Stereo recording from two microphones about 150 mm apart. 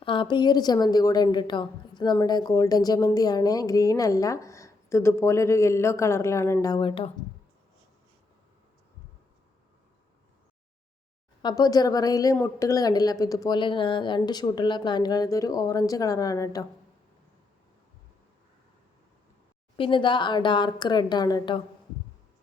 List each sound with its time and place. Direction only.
0.0 s a woman's voice: 35° left (ahead or behind)
11.4 s a woman's voice: 25° left (ahead or behind)
19.7 s speech: 35° left (ahead or behind)